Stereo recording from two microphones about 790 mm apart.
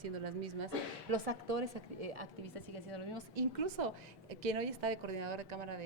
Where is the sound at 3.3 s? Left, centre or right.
Right.